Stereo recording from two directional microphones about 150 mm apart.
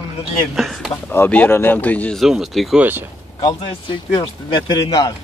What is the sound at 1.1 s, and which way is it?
Speech, 15° left (ahead or behind).